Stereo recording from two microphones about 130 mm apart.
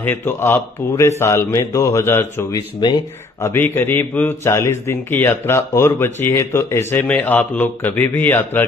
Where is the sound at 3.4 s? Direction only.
15° left (ahead or behind).